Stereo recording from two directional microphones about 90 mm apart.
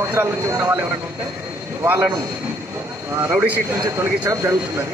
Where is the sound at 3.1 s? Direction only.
25° right (ahead or behind).